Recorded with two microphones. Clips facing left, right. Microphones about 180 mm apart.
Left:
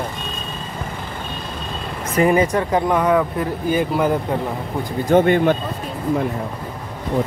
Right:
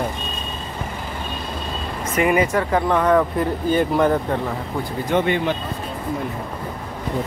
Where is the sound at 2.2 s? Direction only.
35° left (ahead or behind).